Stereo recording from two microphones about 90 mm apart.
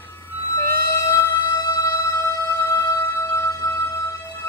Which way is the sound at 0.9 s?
25° left (ahead or behind).